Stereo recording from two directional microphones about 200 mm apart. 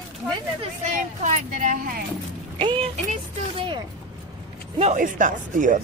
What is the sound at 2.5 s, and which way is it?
Speech, 25° right (ahead or behind).